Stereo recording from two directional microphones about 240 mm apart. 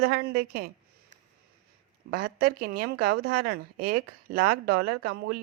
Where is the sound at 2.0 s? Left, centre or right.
Right.